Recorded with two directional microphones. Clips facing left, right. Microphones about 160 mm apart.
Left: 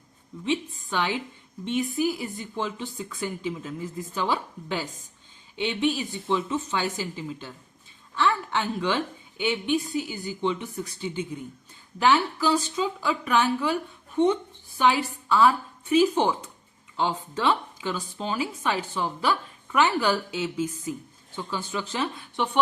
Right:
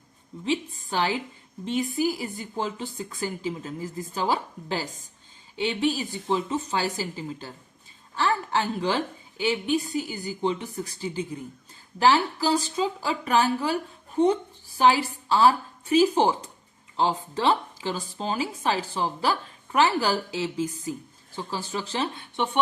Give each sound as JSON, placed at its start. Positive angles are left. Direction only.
{"t": 0.4, "sound": "a woman's voice", "side_deg": -35}
{"t": 14.8, "sound": "speech", "side_deg": -35}